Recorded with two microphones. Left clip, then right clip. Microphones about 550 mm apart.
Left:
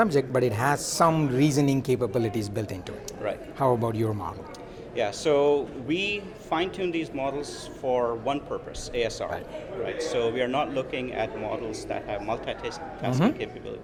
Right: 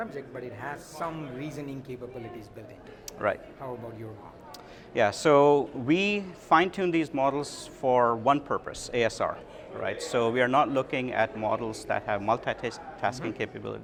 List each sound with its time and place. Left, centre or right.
0.0 s a man's voice: left
3.2 s speech: right
3.6 s a man's voice: left
4.9 s a man's voice: right